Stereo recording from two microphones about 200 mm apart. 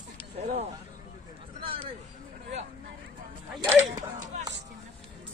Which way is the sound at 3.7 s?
15° right (ahead or behind).